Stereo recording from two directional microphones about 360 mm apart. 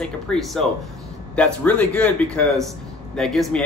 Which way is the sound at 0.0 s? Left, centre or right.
Centre.